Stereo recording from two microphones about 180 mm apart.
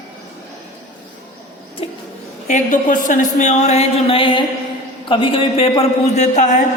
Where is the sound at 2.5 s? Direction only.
45° left (ahead or behind).